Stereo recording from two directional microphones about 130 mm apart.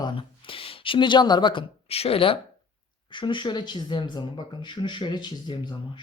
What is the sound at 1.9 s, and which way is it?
Speech, 50° left (ahead or behind).